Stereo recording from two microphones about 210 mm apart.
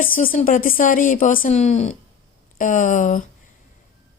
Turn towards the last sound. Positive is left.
turn(degrees=40)  # may be behind; listen again after turning